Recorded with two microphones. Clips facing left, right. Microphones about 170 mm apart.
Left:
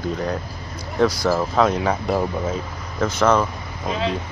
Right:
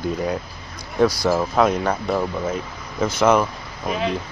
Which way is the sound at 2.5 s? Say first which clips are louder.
Even; 10° right (ahead or behind).